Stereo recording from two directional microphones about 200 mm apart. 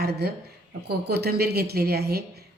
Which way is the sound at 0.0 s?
50° right (ahead or behind).